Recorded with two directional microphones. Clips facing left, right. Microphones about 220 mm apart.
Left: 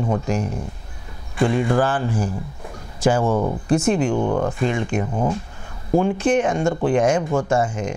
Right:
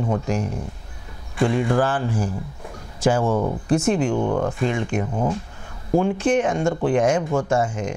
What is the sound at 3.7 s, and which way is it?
Speech, 10° left (ahead or behind).